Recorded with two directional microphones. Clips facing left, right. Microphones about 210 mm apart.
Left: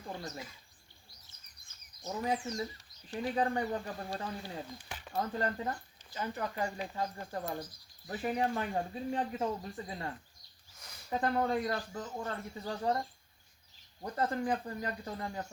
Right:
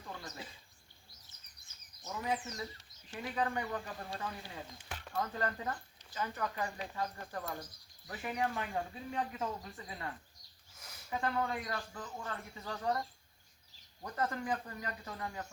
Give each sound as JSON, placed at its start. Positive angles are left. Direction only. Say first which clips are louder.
{"t": 0.0, "sound": "bird", "louder": "left 5 dB", "side_deg": 25}
{"t": 2.0, "sound": "speech", "louder": "left 3 dB", "side_deg": 30}
{"t": 4.9, "sound": "a sound", "louder": "even", "side_deg": 5}
{"t": 5.1, "sound": "speech", "louder": "left 3 dB", "side_deg": 25}
{"t": 10.8, "sound": "a sound", "louder": "even", "side_deg": -5}
{"t": 11.1, "sound": "speech", "louder": "left 5 dB", "side_deg": 40}